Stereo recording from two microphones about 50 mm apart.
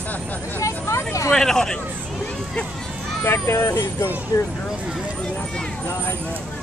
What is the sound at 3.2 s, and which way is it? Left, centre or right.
Speech, left.